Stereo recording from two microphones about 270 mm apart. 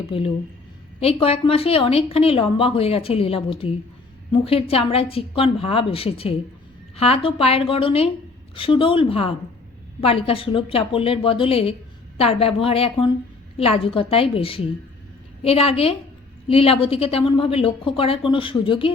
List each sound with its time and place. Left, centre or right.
0.9 s a woman's voice: left